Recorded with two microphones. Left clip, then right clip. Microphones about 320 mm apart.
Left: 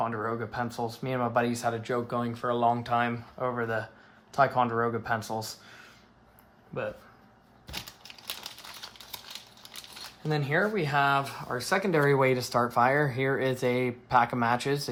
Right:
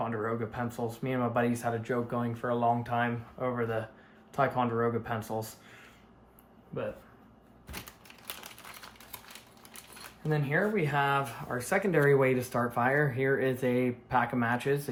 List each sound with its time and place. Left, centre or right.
0.0 s speech: centre
10.2 s speech: left